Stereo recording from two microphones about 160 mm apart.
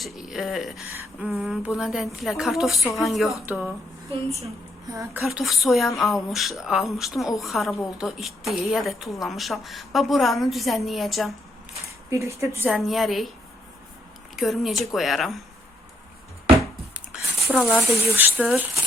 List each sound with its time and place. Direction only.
0.0 s speech: centre (ahead or behind)
4.9 s speech: 20° right (ahead or behind)
5.2 s speech: centre (ahead or behind)
12.1 s speech: 20° right (ahead or behind)
12.7 s speech: centre (ahead or behind)
14.3 s speech: centre (ahead or behind)
17.5 s speech: 10° left (ahead or behind)
17.9 s speech: 10° right (ahead or behind)
18.4 s speech: centre (ahead or behind)